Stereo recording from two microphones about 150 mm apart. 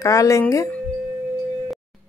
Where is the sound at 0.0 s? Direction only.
20° left (ahead or behind).